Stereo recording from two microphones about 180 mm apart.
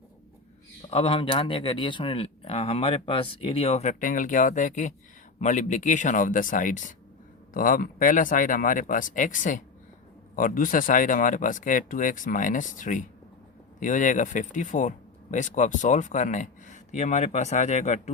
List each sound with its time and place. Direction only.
0.8 s speech: 30° left (ahead or behind)